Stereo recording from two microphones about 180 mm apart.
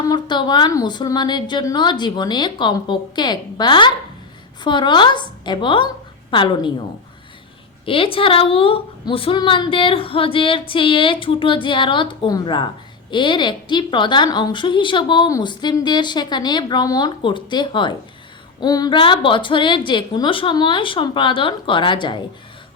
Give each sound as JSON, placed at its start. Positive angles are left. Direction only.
{"t": 0.1, "sound": "a woman's voice", "side_deg": 25}
{"t": 7.9, "sound": "a woman's voice", "side_deg": 30}